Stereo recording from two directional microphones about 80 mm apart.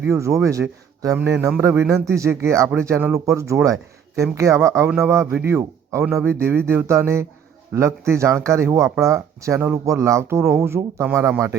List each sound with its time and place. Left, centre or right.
0.0 s speech: right
1.1 s a sound: right
1.9 s speech: right